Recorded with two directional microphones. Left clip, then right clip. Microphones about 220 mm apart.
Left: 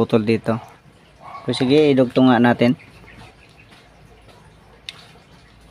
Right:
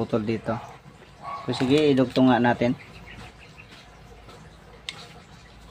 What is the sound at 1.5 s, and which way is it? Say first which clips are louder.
Speech: left 6 dB; 50° left (ahead or behind).